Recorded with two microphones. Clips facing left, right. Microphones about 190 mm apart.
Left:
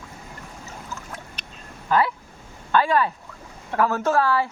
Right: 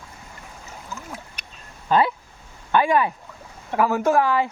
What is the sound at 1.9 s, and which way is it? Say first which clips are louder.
Speech: right 2 dB; 20° right (ahead or behind).